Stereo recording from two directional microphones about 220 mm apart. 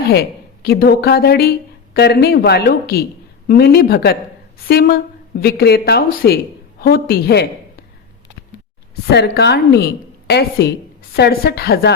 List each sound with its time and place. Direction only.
0.1 s a woman's voice: 45° left (ahead or behind)
9.0 s a woman's voice: 45° left (ahead or behind)